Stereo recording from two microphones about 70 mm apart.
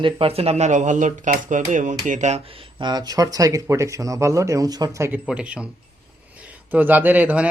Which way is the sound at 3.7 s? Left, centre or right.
Right.